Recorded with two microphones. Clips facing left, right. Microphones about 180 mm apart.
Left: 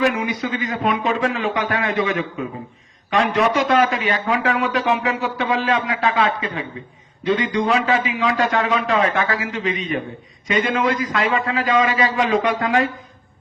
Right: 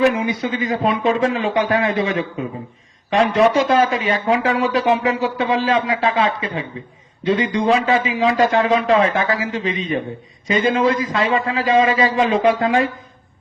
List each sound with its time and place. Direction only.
0.0 s speech: 30° right (ahead or behind)
3.3 s speech: 30° right (ahead or behind)